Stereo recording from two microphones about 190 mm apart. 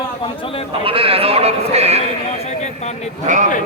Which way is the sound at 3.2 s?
40° right (ahead or behind).